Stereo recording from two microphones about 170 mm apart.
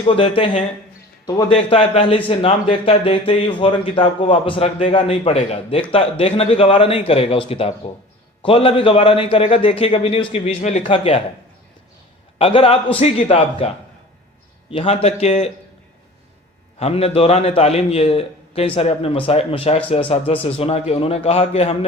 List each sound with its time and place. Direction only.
0.2 s a man's voice: 35° left (ahead or behind)
12.4 s a man's voice: 35° left (ahead or behind)
16.8 s a man's voice: 35° left (ahead or behind)